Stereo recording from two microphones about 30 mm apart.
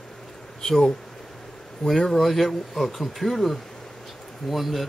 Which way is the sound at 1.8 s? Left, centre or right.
Centre.